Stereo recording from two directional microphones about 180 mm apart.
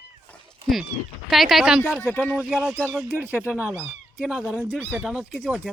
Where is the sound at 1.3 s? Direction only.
Centre (ahead or behind).